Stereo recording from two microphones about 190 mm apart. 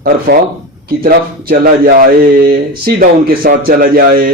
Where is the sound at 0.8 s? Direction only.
50° right (ahead or behind).